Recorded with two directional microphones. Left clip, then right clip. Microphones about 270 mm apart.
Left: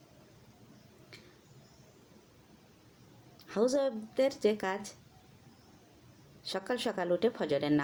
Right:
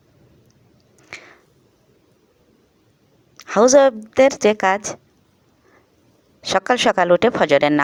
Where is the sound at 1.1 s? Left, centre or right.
Centre.